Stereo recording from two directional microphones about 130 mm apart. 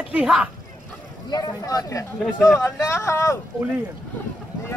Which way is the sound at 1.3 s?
30° left (ahead or behind).